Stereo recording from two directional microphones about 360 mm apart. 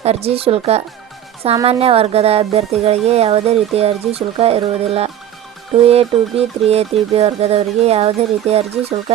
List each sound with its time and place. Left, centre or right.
0.0 s speech: centre